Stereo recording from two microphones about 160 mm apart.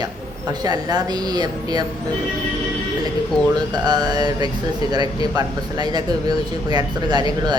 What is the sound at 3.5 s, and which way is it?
A woman's voice, 25° right (ahead or behind).